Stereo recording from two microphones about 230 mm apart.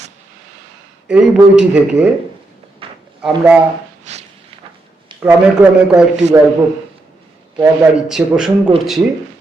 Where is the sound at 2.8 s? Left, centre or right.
Right.